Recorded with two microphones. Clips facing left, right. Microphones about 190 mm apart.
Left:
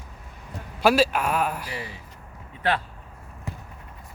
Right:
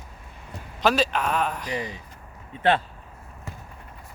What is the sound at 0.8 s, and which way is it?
Speech, 10° left (ahead or behind).